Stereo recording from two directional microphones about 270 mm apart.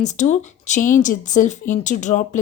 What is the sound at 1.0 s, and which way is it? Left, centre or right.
A woman's voice, left.